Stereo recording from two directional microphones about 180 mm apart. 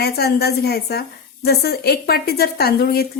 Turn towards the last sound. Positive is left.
turn(degrees=60)  # may be behind; listen again after turning